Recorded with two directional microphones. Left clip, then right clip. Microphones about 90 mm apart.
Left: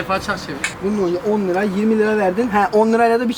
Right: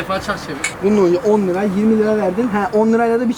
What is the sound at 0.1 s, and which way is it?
Speech, 5° left (ahead or behind).